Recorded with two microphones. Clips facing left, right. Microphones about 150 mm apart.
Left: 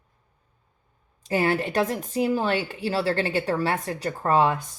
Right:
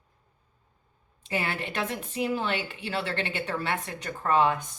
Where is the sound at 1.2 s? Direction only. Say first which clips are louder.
Left 8 dB; 40° left (ahead or behind).